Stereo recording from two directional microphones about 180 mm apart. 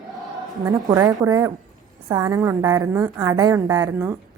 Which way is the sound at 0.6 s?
20° right (ahead or behind).